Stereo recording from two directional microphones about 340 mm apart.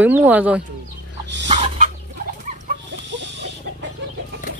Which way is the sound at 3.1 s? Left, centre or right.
Right.